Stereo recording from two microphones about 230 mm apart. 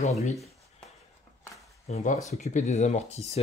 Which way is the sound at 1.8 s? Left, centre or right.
Left.